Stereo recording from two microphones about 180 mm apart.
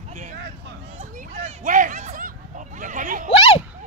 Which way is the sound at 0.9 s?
35° right (ahead or behind).